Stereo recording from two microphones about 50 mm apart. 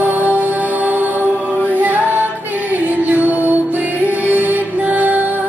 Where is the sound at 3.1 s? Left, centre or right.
Right.